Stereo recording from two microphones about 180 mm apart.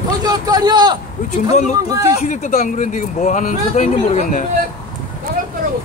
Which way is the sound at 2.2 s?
40° left (ahead or behind).